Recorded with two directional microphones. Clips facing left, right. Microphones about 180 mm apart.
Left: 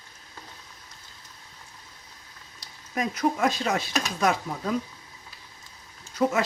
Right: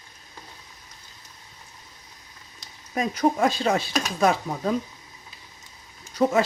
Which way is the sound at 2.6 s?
30° right (ahead or behind).